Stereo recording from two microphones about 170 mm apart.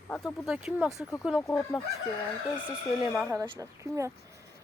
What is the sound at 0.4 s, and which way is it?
Speech, 5° right (ahead or behind).